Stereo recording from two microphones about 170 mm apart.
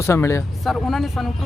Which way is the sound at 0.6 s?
Centre (ahead or behind).